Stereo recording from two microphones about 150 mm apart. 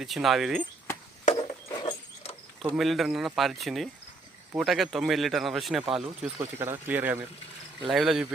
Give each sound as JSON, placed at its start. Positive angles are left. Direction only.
{"t": 0.0, "sound": "speech", "side_deg": 0}
{"t": 1.4, "sound": "a sound", "side_deg": 35}
{"t": 2.7, "sound": "speech", "side_deg": 0}
{"t": 6.4, "sound": "speech", "side_deg": -15}